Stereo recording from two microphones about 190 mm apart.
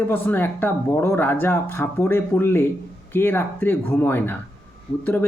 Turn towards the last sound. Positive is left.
turn(degrees=10)  # may be behind; listen again after turning